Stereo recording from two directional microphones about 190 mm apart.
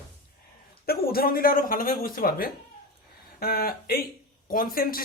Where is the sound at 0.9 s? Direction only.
50° left (ahead or behind).